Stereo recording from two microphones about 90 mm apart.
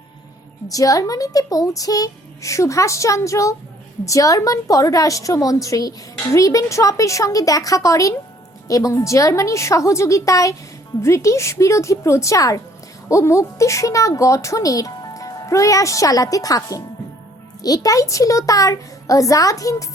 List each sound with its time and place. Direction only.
0.7 s a woman's voice: 40° left (ahead or behind)